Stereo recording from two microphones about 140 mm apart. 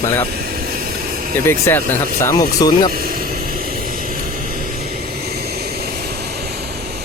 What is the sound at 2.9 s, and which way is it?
Vehicle, 90° right.